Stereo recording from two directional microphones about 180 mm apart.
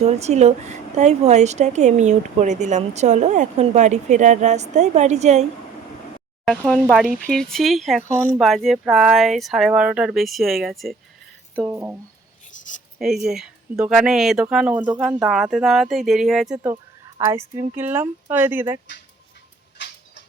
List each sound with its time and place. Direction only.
0.0 s a woman's voice: 40° right (ahead or behind)
6.4 s speech: centre (ahead or behind)
11.6 s speech: 10° right (ahead or behind)
13.0 s speech: centre (ahead or behind)
17.2 s speech: 15° right (ahead or behind)
19.8 s a sound: 75° left (ahead or behind)